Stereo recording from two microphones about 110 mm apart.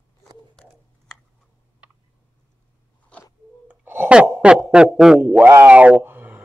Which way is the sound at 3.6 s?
15° right (ahead or behind).